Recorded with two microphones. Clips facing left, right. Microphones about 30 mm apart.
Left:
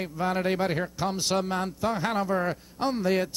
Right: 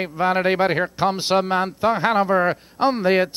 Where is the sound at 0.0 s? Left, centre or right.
Right.